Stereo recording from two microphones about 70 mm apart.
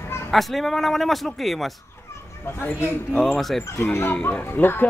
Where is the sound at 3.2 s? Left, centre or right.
Centre.